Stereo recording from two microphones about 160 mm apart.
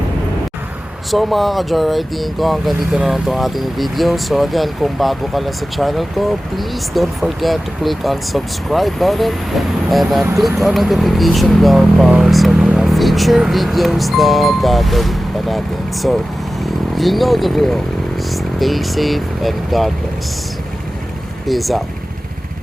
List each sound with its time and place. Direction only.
1.1 s speech: centre (ahead or behind)
21.4 s speech: centre (ahead or behind)